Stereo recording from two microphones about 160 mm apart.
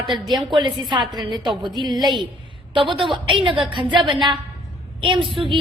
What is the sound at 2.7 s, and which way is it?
A woman's voice, 30° right (ahead or behind).